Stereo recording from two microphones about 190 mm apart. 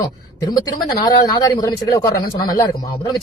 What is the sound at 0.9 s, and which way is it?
Speech, 20° left (ahead or behind).